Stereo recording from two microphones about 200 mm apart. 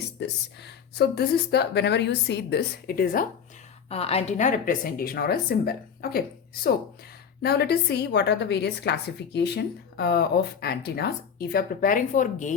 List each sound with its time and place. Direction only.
0.2 s a woman's voice: 60° left (ahead or behind)
3.8 s a woman's voice: 30° left (ahead or behind)